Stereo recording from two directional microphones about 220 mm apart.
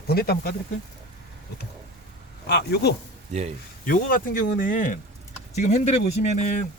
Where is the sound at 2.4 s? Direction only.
50° left (ahead or behind).